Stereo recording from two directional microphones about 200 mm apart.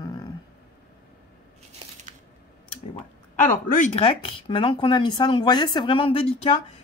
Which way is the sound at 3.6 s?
40° left (ahead or behind).